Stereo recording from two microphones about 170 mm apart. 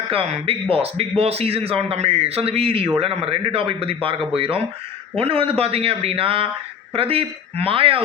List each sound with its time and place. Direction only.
0.1 s speech: 35° right (ahead or behind)